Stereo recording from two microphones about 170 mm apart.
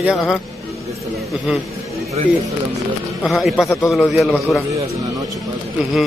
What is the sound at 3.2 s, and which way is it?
A man's voice, centre (ahead or behind).